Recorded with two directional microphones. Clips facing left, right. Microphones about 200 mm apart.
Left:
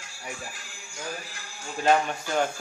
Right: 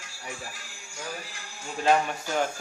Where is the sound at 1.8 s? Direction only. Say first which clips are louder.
Left 1 dB; centre (ahead or behind).